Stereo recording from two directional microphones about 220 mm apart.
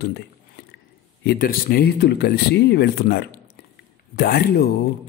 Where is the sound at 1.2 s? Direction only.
45° left (ahead or behind).